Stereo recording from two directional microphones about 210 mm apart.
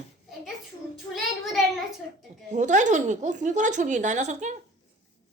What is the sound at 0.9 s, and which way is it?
Child singing, centre (ahead or behind).